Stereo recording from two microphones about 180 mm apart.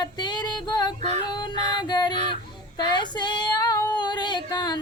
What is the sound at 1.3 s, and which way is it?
Child singing, 25° left (ahead or behind).